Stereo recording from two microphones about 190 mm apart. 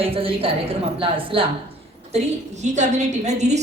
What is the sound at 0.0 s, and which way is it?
A woman's voice, 30° right (ahead or behind).